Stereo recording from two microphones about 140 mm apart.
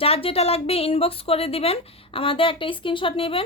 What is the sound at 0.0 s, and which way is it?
Speech, 45° left (ahead or behind).